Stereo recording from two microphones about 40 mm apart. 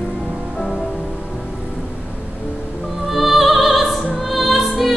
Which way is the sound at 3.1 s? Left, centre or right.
Centre.